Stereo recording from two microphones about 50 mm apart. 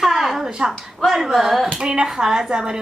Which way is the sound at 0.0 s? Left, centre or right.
Centre.